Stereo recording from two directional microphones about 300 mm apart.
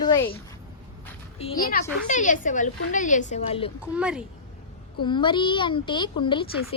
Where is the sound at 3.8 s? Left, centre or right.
Centre.